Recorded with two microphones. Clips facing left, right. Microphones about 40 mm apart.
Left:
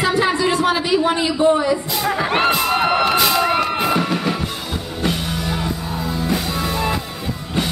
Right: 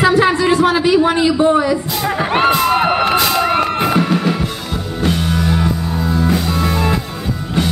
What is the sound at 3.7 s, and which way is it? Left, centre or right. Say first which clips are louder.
Music: right 4 dB; centre.